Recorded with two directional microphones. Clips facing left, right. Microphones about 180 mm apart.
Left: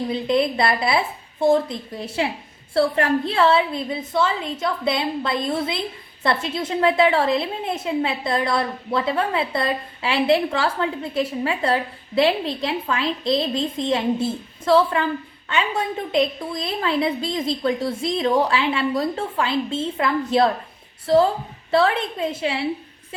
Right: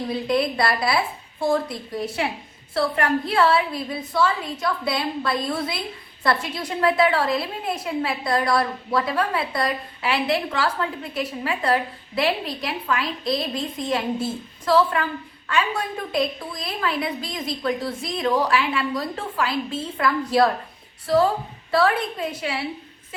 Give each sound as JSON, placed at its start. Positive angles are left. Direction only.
{"t": 0.1, "sound": "a woman's voice", "side_deg": 20}
{"t": 21.7, "sound": "a woman's voice", "side_deg": 25}